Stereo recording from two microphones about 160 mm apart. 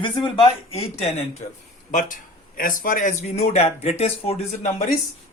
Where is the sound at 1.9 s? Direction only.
55° left (ahead or behind).